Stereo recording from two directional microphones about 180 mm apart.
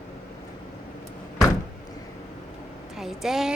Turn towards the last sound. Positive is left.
turn(degrees=0)  # may be behind; listen again after turning